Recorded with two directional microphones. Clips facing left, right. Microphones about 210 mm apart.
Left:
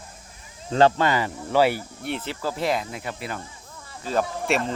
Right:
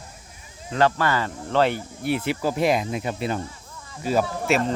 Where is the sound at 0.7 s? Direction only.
30° left (ahead or behind); by 1.8 s 10° left (ahead or behind).